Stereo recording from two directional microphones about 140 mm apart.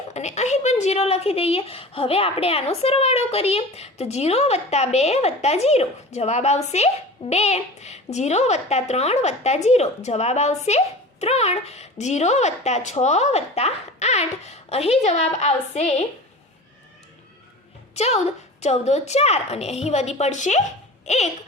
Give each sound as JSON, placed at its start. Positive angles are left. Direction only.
{"t": 0.1, "sound": "a woman's voice", "side_deg": 55}
{"t": 17.9, "sound": "a woman's voice", "side_deg": 50}